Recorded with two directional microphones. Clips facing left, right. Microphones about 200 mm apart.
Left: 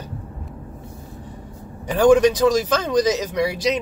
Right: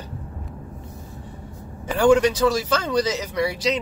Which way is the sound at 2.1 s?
15° left (ahead or behind).